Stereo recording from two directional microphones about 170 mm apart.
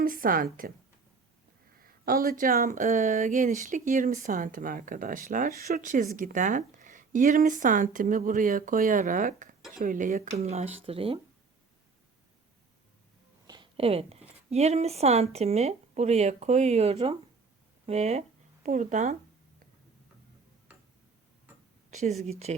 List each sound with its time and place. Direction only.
0.0 s a woman's voice: 55° right (ahead or behind)
2.0 s speech: 60° right (ahead or behind); by 11.2 s 35° right (ahead or behind)
13.5 s a woman's voice: 30° right (ahead or behind)
21.8 s speech: 45° right (ahead or behind)